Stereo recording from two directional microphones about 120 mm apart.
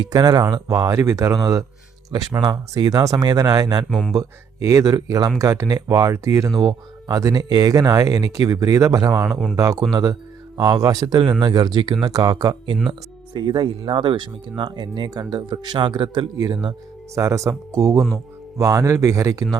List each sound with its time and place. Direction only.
0.0 s speech: 35° right (ahead or behind)
3.8 s speech: 5° left (ahead or behind)
4.1 s speech: 30° right (ahead or behind)
17.2 s speech: 25° right (ahead or behind)